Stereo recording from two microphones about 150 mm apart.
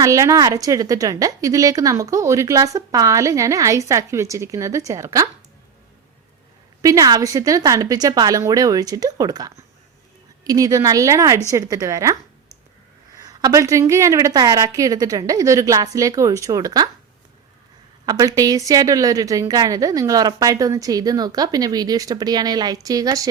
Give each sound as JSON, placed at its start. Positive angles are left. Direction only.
{"t": 0.0, "sound": "a woman's voice", "side_deg": -20}
{"t": 6.8, "sound": "a woman's voice", "side_deg": -25}
{"t": 13.1, "sound": "a woman's voice", "side_deg": -25}
{"t": 18.0, "sound": "a woman's voice", "side_deg": -25}